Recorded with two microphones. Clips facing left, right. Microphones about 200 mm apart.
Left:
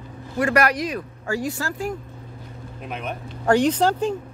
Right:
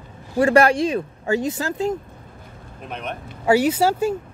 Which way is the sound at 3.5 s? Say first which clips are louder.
Right 1 dB; 10° right (ahead or behind).